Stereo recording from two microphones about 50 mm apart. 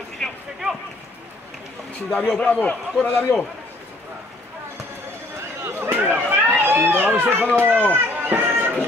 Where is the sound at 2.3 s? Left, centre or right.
Left.